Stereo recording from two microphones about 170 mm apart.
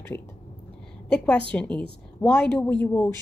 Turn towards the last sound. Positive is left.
turn(degrees=10)  # may be behind; listen again after turning